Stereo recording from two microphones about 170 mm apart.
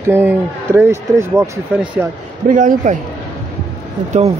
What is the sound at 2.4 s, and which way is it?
Speech, 50° right (ahead or behind).